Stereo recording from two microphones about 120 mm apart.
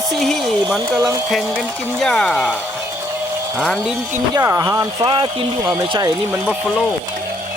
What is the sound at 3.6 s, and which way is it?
Speech, 5° left (ahead or behind).